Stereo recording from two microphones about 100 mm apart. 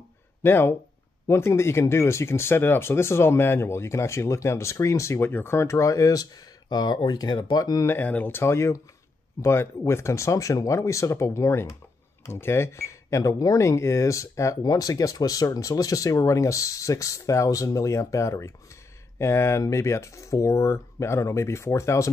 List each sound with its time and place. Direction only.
0.4 s speech: 20° left (ahead or behind); by 7.8 s 40° left (ahead or behind)
7.8 s speech: 20° left (ahead or behind)